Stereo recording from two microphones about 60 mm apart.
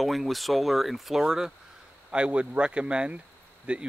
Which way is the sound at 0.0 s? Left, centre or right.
Centre.